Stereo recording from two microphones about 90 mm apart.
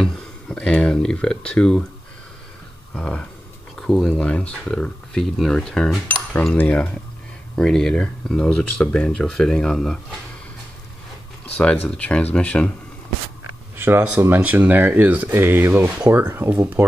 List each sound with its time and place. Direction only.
0.0 s speech: 10° left (ahead or behind)
2.9 s speech: 10° left (ahead or behind)
6.0 s speech: 20° left (ahead or behind)
11.5 s speech: 15° left (ahead or behind)
13.7 s a sound: 25° right (ahead or behind)
14.2 s speech: 20° right (ahead or behind)